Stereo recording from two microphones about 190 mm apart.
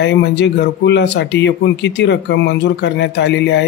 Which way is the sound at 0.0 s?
65° left (ahead or behind).